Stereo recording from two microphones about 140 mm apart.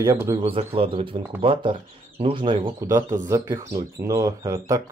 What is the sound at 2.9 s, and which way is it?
Speech, 20° right (ahead or behind).